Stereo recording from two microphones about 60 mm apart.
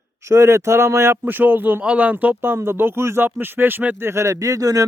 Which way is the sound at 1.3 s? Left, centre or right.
Right.